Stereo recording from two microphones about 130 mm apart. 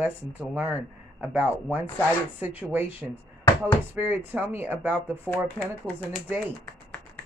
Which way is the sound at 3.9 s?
15° right (ahead or behind).